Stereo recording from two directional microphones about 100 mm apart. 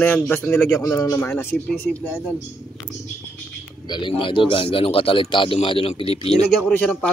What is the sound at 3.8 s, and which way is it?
A man's voice, 50° left (ahead or behind).